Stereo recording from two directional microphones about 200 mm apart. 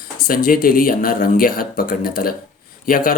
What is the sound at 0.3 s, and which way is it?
Speech, 45° left (ahead or behind).